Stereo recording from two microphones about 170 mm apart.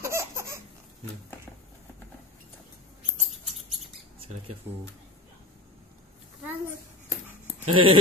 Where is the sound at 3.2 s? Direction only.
Centre (ahead or behind).